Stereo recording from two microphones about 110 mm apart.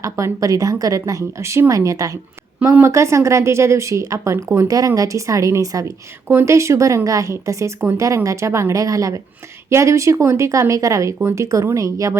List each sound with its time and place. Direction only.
0.0 s a woman's voice: 30° right (ahead or behind)